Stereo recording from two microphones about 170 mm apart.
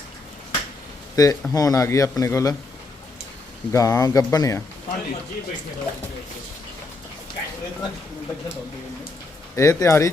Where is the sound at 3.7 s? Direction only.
20° left (ahead or behind).